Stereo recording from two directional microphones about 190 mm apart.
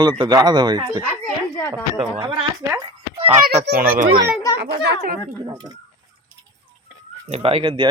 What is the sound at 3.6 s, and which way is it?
Speech, 50° right (ahead or behind).